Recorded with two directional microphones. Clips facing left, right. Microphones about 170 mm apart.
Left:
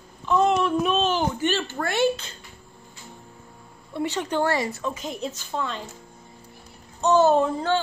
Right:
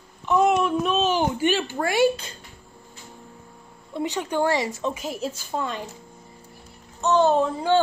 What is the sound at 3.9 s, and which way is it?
A woman's voice, 15° right (ahead or behind).